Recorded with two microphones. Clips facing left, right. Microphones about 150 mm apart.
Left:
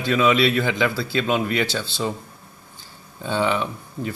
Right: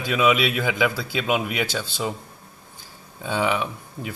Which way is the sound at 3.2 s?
5° right (ahead or behind).